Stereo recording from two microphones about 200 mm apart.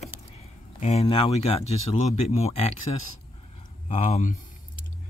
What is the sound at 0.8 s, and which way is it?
Speech, 35° left (ahead or behind).